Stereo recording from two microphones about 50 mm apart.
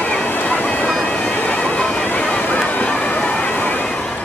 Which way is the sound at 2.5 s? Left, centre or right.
Left.